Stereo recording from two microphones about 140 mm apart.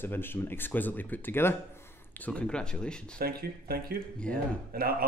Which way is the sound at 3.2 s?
90° right.